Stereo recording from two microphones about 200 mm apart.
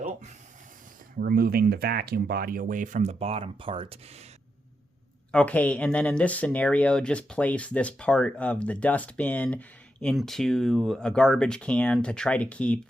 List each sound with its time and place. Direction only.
1.2 s speech: 50° right (ahead or behind); by 4.2 s 25° right (ahead or behind)
5.3 s speech: 5° left (ahead or behind)